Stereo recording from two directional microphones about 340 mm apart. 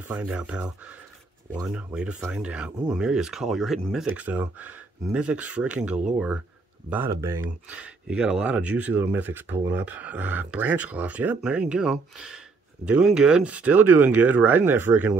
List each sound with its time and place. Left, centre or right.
0.1 s speech: centre
1.7 s speech: centre